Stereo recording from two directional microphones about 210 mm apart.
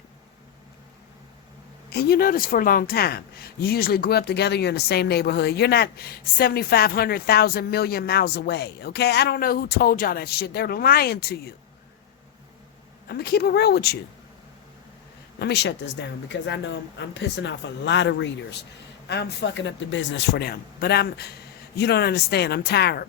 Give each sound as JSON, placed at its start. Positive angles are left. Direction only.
{"t": 1.9, "sound": "speech", "side_deg": 50}
{"t": 13.1, "sound": "speech", "side_deg": 50}
{"t": 15.4, "sound": "speech", "side_deg": 55}